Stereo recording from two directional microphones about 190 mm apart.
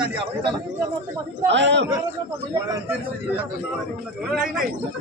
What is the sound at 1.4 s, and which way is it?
Speech, 70° right (ahead or behind).